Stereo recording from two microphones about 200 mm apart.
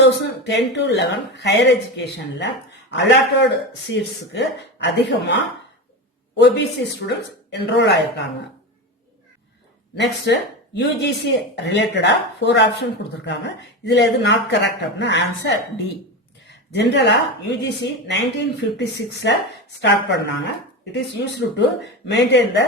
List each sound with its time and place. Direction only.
0.0 s speech: 60° left (ahead or behind)
9.9 s speech: 60° left (ahead or behind)